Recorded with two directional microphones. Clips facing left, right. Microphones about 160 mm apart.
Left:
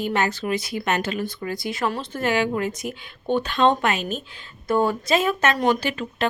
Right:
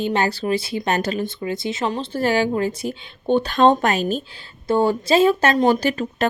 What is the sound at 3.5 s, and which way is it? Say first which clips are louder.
Speech: right 3 dB; 40° right (ahead or behind).